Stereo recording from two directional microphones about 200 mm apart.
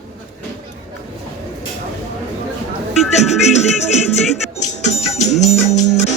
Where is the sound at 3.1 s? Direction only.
35° left (ahead or behind).